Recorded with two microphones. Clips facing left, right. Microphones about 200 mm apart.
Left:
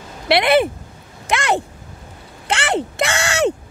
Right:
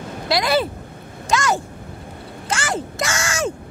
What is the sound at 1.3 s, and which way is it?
Vehicle, 60° left (ahead or behind).